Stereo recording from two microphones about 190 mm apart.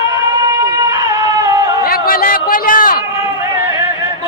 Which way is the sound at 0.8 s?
20° right (ahead or behind).